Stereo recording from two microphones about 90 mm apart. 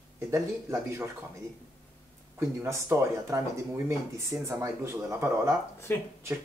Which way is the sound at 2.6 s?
30° right (ahead or behind).